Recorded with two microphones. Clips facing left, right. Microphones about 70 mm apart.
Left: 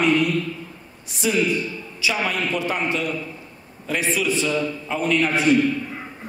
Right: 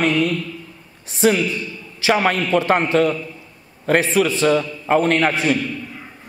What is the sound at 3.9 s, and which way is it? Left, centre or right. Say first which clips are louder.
A man's voice: right 6 dB; right.